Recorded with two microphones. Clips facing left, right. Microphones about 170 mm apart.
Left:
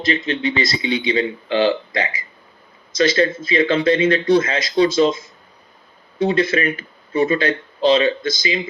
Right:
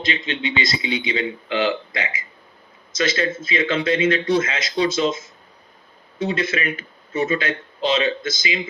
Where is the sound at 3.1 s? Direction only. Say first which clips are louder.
Left 6 dB; 35° left (ahead or behind).